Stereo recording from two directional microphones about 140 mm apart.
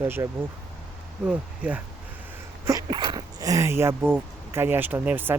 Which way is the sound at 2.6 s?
30° right (ahead or behind).